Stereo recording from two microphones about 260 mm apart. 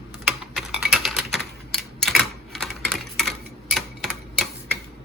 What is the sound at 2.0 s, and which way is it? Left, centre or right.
Typewriter, centre.